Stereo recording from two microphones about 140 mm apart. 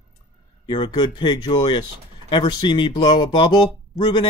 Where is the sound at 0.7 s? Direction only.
35° left (ahead or behind).